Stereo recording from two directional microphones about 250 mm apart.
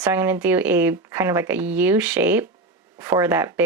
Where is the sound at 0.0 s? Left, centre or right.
Centre.